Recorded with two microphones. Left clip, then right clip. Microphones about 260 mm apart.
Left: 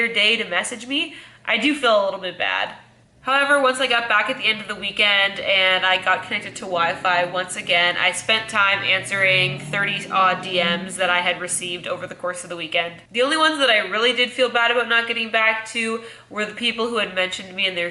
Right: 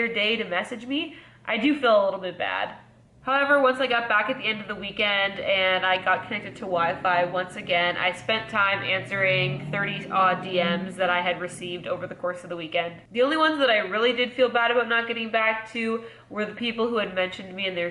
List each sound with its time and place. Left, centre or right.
0.0 s a woman's voice: centre
2.0 s speech: right
3.3 s a woman's voice: centre